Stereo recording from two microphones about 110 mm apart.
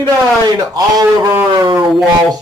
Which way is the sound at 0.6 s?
35° right (ahead or behind).